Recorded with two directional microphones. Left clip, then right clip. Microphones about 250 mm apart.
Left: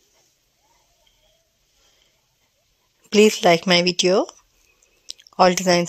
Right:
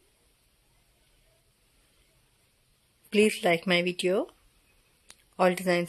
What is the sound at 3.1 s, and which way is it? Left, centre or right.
Speech, centre.